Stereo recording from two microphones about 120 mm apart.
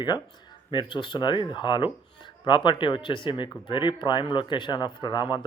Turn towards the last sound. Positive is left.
turn(degrees=40)  # may be behind; listen again after turning